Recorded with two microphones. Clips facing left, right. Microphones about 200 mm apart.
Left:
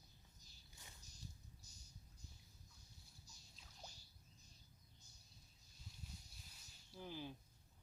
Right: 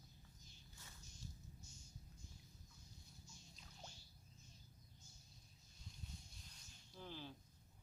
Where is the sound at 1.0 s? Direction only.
35° left (ahead or behind).